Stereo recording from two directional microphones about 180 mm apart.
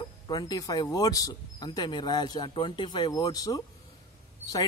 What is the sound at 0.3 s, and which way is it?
Speech, 20° left (ahead or behind).